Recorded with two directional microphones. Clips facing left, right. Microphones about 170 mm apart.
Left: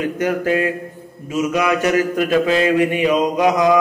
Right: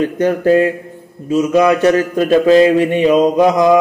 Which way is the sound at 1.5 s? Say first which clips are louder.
Right 6 dB; 30° right (ahead or behind).